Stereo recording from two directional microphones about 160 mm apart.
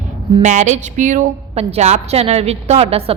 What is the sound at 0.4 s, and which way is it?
A woman's voice, 45° right (ahead or behind).